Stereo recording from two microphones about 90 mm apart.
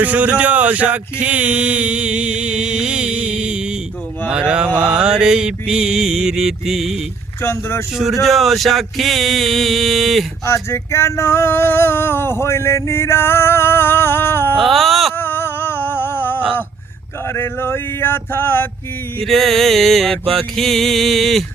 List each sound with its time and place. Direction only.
0.0 s speech: 15° right (ahead or behind); by 10.2 s centre (ahead or behind)
10.4 s male singing: 30° left (ahead or behind)
14.6 s speech: centre (ahead or behind)
15.1 s a sound: 25° left (ahead or behind)
17.3 s male singing: 25° left (ahead or behind)
19.2 s speech: centre (ahead or behind)